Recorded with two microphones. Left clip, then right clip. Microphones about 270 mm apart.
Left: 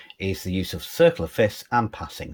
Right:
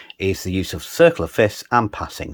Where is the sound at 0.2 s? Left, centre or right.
Centre.